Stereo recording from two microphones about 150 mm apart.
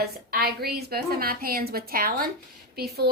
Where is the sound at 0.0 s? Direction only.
90° right.